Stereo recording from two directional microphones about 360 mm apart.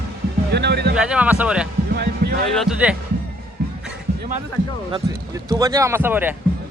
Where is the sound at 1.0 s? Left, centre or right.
Centre.